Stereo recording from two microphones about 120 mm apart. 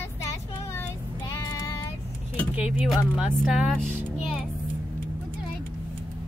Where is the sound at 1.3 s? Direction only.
25° left (ahead or behind).